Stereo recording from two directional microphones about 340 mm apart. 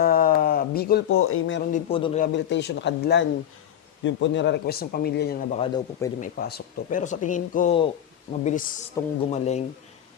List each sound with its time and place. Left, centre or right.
0.0 s a sound: left
1.7 s a man's voice: centre
2.2 s speech: left; by 6.2 s centre
6.2 s speech: left
9.0 s a man's voice: centre
9.3 s speech: centre